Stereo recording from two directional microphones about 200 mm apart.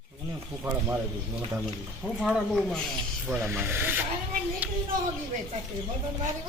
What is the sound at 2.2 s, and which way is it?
Speech, centre (ahead or behind).